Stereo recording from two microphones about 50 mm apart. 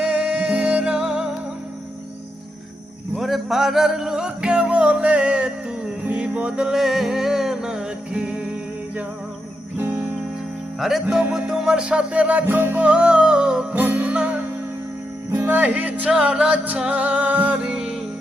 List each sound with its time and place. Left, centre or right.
0.0 s music: right
3.2 s music: centre
9.7 s music: right
10.8 s music: centre
11.2 s music: centre
12.5 s music: right
12.8 s music: right
13.7 s music: right
15.3 s music: right
16.0 s music: centre
17.6 s music: centre